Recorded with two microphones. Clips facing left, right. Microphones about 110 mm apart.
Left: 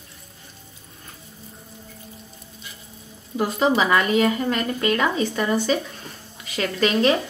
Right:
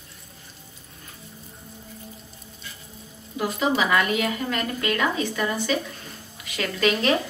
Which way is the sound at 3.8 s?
30° left (ahead or behind).